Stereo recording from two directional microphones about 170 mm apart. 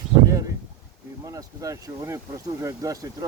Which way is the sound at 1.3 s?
20° right (ahead or behind).